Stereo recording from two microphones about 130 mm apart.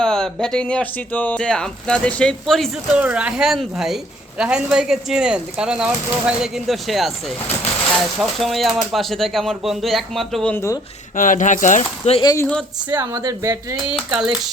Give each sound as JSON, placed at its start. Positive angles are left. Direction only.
{"t": 0.0, "sound": "speech", "side_deg": 5}
{"t": 2.9, "sound": "a woman's voice", "side_deg": -10}
{"t": 8.2, "sound": "a woman's voice", "side_deg": 0}
{"t": 10.5, "sound": "speech", "side_deg": 20}
{"t": 11.2, "sound": "speech", "side_deg": 85}
{"t": 12.2, "sound": "speech", "side_deg": 30}
{"t": 13.0, "sound": "speech", "side_deg": -25}